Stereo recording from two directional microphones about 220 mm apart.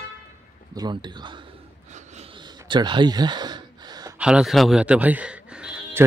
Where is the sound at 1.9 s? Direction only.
30° right (ahead or behind).